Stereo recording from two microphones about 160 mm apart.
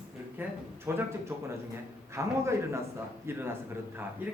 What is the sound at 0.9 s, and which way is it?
Speech, 15° right (ahead or behind).